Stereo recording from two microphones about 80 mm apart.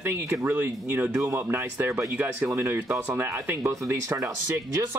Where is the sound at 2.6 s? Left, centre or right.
Right.